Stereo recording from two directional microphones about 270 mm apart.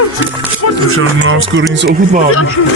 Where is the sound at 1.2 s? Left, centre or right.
Right.